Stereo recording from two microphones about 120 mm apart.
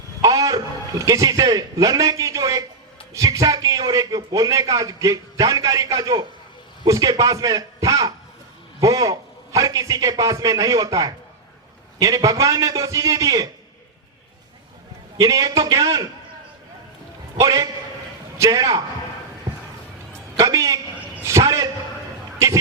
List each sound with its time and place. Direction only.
0.2 s a man's voice: 30° right (ahead or behind)
15.2 s a man's voice: 30° right (ahead or behind)
17.3 s a man's voice: 30° right (ahead or behind)
20.3 s a woman's voice: 25° right (ahead or behind)